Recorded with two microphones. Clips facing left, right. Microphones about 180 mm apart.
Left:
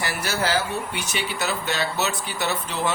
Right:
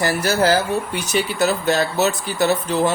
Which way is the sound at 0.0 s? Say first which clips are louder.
Right 8 dB; 40° right (ahead or behind).